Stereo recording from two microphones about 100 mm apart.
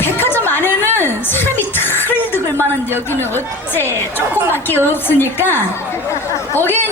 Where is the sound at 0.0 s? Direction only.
20° left (ahead or behind).